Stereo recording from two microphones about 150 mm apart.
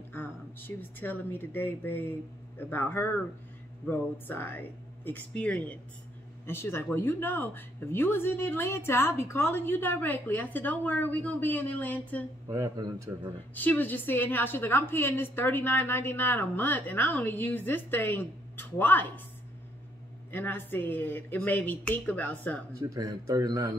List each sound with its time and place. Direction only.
0.1 s speech: 15° left (ahead or behind)
12.4 s a man's voice: 20° right (ahead or behind)
13.6 s speech: 10° left (ahead or behind)
20.2 s speech: 15° left (ahead or behind)
22.8 s a man's voice: 25° right (ahead or behind)